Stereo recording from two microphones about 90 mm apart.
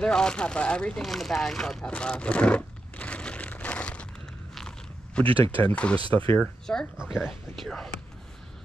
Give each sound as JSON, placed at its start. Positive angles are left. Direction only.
{"t": 0.0, "sound": "speech", "side_deg": 10}
{"t": 4.6, "sound": "biting", "side_deg": 5}
{"t": 5.2, "sound": "speech", "side_deg": -80}
{"t": 5.5, "sound": "speech", "side_deg": 15}
{"t": 7.0, "sound": "speech", "side_deg": -5}